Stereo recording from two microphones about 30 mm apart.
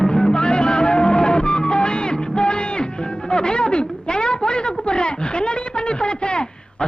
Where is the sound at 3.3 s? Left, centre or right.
Left.